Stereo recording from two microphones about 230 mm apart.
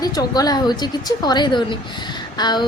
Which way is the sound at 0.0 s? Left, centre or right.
Centre.